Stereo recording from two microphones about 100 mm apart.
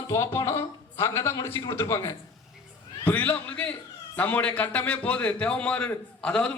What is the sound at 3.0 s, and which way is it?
A man's voice, 15° left (ahead or behind).